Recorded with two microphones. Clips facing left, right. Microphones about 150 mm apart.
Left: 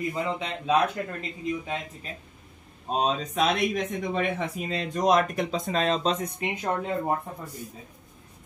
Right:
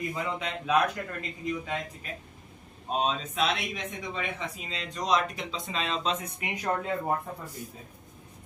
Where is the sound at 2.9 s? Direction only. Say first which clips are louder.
Left 3 dB; 40° left (ahead or behind).